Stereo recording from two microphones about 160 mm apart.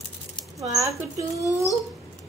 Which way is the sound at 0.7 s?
20° right (ahead or behind).